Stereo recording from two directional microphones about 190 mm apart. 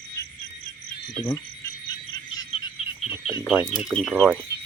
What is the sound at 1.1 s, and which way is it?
Speech, 20° left (ahead or behind).